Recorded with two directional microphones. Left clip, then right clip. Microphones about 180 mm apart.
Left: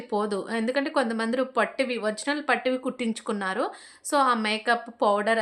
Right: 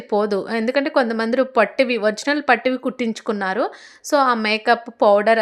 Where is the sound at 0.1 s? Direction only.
35° right (ahead or behind).